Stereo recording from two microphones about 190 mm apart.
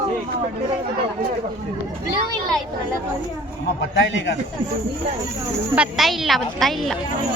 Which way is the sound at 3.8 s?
75° left (ahead or behind).